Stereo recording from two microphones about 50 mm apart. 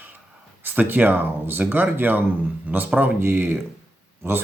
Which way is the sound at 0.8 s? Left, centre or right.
Right.